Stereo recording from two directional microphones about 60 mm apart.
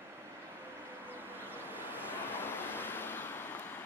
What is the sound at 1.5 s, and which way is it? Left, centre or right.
Waves, right.